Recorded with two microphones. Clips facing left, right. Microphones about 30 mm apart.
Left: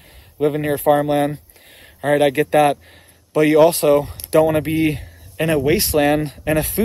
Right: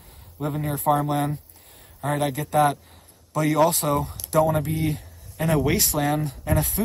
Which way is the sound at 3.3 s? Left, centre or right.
Left.